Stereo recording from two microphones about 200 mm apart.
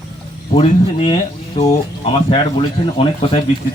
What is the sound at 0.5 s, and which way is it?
A man's voice, 30° left (ahead or behind).